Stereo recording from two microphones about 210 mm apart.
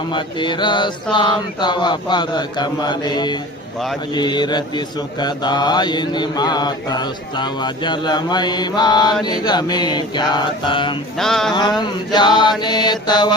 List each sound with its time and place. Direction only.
0.1 s mantra: 20° left (ahead or behind)
11.2 s a sound: centre (ahead or behind)
11.8 s mantra: 20° left (ahead or behind)